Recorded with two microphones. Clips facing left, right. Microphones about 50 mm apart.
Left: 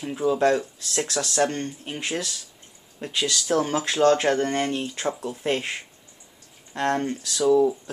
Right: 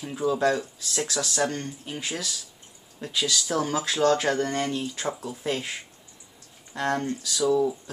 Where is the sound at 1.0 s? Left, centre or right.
Left.